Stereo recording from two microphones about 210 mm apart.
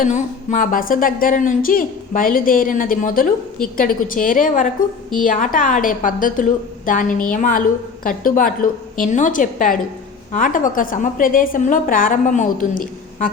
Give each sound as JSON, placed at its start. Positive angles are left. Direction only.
{"t": 0.0, "sound": "a woman's voice", "side_deg": 40}